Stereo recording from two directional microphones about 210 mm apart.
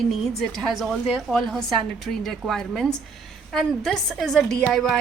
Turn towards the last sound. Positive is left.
turn(degrees=0)  # may be behind; listen again after turning